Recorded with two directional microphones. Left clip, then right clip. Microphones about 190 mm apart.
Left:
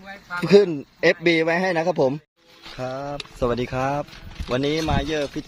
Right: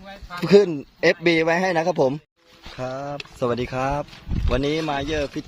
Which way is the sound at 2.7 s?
Centre (ahead or behind).